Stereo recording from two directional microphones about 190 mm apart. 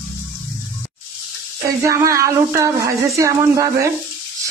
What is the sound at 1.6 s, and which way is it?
Speech, 15° right (ahead or behind).